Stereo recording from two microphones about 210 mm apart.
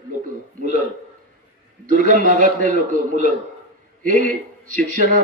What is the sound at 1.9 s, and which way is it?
Speech, 40° right (ahead or behind).